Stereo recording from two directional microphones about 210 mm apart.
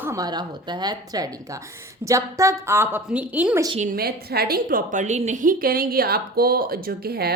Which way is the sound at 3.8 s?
45° right (ahead or behind).